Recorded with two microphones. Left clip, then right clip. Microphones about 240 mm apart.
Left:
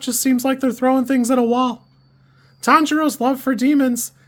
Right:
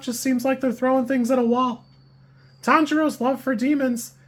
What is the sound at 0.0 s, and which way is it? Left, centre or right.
Speech, left.